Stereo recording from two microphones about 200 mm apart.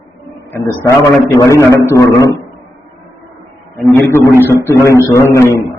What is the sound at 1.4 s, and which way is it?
Speech, 15° left (ahead or behind).